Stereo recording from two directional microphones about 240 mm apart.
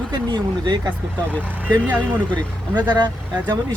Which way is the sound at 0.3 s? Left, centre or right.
Centre.